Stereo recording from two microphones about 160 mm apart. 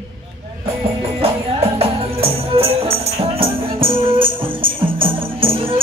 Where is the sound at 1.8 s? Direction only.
40° right (ahead or behind).